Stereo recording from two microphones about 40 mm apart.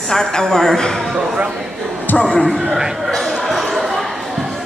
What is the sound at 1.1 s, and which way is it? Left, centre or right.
Speech, right.